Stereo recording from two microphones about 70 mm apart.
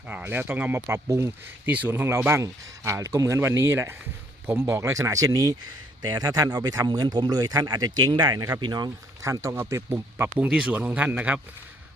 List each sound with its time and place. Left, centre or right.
0.1 s speech: right
1.0 s speech: right
1.6 s speech: right
9.2 s speech: right
10.7 s speech: right